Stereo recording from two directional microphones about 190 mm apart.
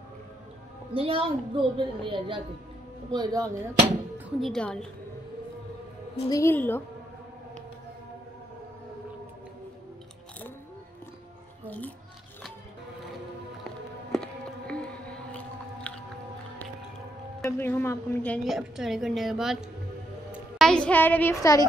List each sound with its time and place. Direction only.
0.9 s a woman's voice: 30° right (ahead or behind)
4.4 s a woman's voice: 5° left (ahead or behind)
6.2 s a woman's voice: 15° left (ahead or behind)
11.6 s music: 10° left (ahead or behind)
13.7 s music: 5° left (ahead or behind)
17.5 s a woman's voice: 10° left (ahead or behind)